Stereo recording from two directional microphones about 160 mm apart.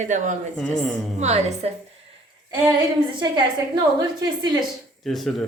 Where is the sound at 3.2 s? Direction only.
30° right (ahead or behind).